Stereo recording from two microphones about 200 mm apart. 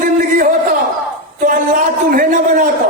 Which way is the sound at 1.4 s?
45° right (ahead or behind).